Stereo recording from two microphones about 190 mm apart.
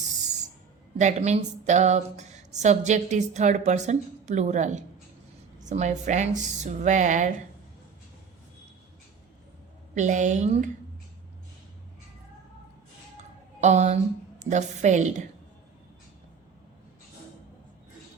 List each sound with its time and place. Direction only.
0.9 s speech: 40° right (ahead or behind)
9.9 s speech: 40° right (ahead or behind)
13.6 s a woman's voice: 35° right (ahead or behind)